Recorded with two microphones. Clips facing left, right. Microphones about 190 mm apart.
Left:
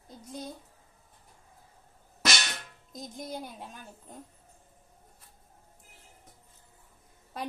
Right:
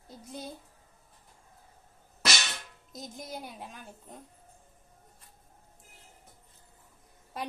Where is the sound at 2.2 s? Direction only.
Centre (ahead or behind).